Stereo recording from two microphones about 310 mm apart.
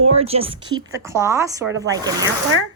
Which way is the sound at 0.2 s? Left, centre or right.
Centre.